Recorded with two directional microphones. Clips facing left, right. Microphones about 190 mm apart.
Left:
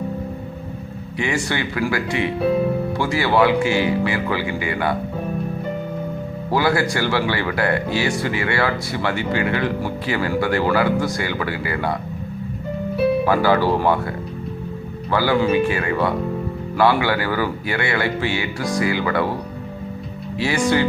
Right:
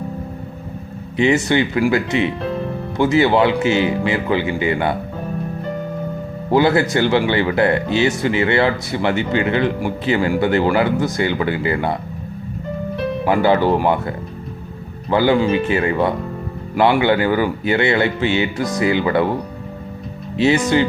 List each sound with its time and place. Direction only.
1.2 s speech: 20° right (ahead or behind)
6.5 s speech: 20° right (ahead or behind)
13.2 s speech: 20° right (ahead or behind)
15.1 s speech: 20° right (ahead or behind)
20.3 s speech: 25° right (ahead or behind)